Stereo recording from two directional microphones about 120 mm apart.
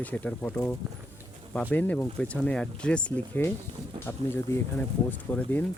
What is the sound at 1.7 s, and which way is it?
Speech, 15° left (ahead or behind).